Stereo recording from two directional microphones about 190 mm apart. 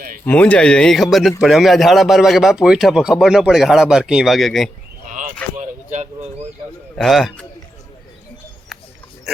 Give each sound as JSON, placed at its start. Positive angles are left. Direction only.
{"t": 0.3, "sound": "a man's voice", "side_deg": 5}
{"t": 5.5, "sound": "a sound", "side_deg": -35}
{"t": 6.9, "sound": "a man's voice", "side_deg": 0}